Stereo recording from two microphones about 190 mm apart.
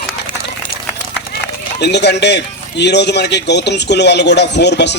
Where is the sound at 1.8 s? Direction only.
65° left (ahead or behind).